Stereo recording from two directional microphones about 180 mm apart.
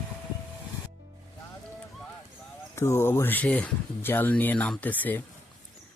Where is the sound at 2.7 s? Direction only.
15° left (ahead or behind).